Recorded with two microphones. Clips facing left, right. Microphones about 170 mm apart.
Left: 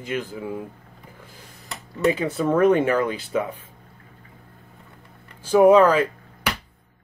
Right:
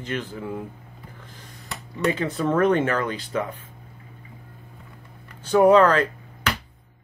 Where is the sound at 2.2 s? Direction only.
10° left (ahead or behind).